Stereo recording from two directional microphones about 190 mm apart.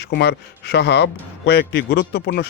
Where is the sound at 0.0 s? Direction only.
60° left (ahead or behind).